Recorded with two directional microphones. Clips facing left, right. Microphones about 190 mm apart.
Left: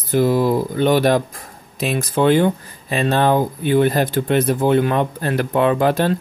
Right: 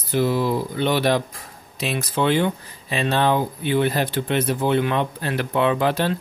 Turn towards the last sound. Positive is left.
turn(degrees=45)  # may be behind; listen again after turning